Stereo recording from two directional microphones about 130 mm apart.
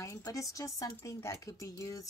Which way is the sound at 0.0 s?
25° left (ahead or behind).